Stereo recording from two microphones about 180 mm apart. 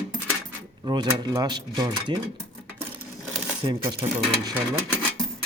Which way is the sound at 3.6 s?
25° right (ahead or behind).